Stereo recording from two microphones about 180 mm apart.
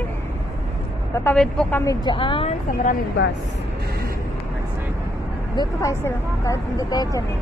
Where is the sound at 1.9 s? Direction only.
25° left (ahead or behind).